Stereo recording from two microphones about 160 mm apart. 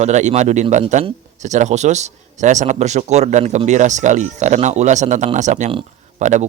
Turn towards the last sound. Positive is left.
turn(degrees=-50)  # may be behind; listen again after turning